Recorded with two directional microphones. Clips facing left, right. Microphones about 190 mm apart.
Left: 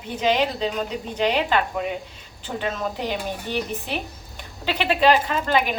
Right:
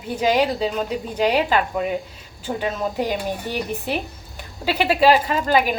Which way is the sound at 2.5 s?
20° right (ahead or behind).